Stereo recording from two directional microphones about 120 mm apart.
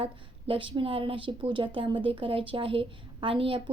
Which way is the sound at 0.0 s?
45° right (ahead or behind).